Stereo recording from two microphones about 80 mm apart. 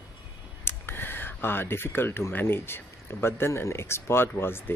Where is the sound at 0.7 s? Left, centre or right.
Left.